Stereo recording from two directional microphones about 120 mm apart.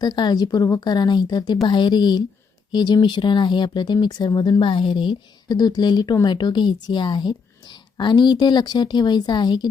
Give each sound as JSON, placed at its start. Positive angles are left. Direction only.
{"t": 0.0, "sound": "a woman's voice", "side_deg": 35}